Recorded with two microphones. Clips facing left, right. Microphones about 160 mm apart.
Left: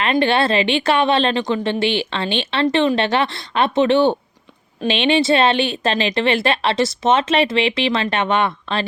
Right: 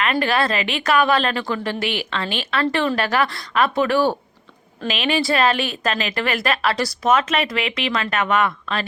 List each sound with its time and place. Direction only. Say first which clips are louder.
0.0 s speech: left 3 dB; 30° left (ahead or behind)